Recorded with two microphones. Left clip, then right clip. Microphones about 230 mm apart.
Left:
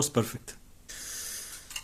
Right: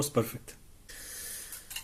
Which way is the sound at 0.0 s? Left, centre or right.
Left.